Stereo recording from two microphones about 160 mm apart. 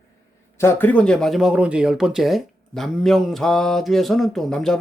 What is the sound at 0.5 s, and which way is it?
Speech, 15° left (ahead or behind).